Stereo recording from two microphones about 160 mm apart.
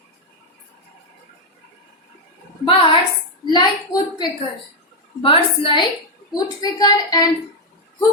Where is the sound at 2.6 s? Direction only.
35° left (ahead or behind).